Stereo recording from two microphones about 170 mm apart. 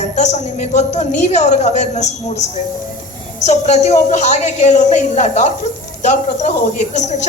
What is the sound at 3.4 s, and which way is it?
A woman's voice, 40° left (ahead or behind).